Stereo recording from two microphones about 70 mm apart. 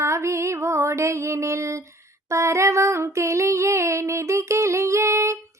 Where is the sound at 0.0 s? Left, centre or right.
Right.